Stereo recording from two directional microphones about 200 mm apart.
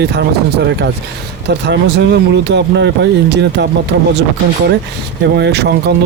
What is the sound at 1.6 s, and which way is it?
Speech, 60° right (ahead or behind).